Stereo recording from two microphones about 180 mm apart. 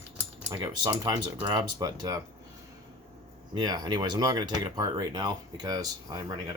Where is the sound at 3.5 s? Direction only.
20° right (ahead or behind).